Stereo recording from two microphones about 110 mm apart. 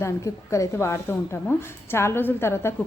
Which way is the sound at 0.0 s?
30° left (ahead or behind).